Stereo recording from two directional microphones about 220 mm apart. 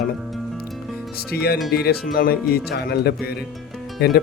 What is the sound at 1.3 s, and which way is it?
Speech, 45° left (ahead or behind).